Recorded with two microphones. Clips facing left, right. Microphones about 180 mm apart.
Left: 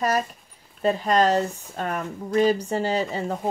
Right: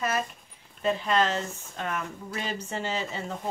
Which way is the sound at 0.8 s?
40° left (ahead or behind).